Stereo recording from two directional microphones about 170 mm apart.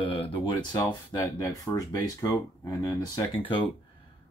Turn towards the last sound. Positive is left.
turn(degrees=25)  # may be behind; listen again after turning